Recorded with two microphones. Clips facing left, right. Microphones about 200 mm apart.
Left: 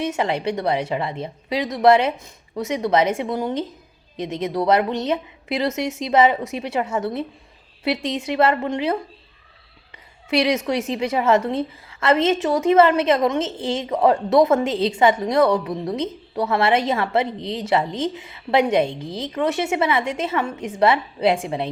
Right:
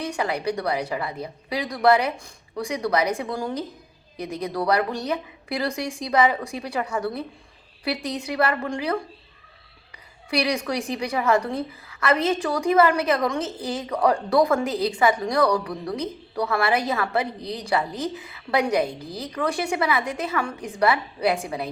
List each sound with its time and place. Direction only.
0.0 s a woman's voice: 25° left (ahead or behind)
10.2 s a woman's voice: 25° left (ahead or behind)